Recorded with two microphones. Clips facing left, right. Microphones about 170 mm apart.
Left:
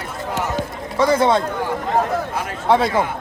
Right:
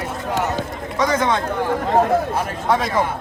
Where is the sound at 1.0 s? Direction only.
30° left (ahead or behind).